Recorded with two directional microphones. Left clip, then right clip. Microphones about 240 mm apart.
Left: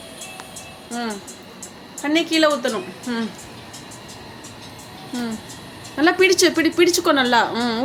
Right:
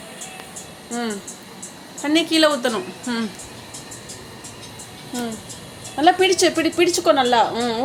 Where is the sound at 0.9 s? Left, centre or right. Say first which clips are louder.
Right 1 dB; centre.